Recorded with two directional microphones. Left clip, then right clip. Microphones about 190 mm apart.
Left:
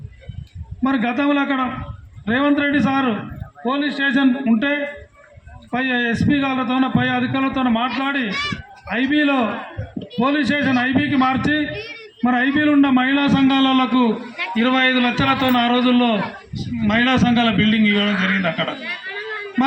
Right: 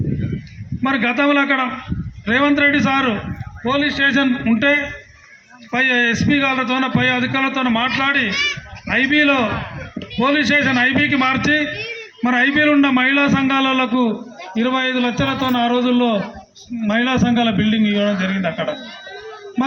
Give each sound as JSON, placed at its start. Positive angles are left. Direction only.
{"t": 0.8, "sound": "a man's voice", "side_deg": -25}
{"t": 11.7, "sound": "a man's voice", "side_deg": 30}
{"t": 12.2, "sound": "a man's voice", "side_deg": -25}
{"t": 13.3, "sound": "a man's voice", "side_deg": -60}